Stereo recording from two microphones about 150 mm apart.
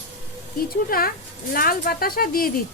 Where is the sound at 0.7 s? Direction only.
80° left.